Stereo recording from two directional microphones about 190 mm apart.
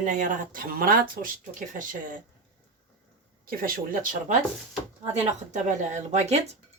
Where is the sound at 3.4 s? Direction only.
50° right (ahead or behind).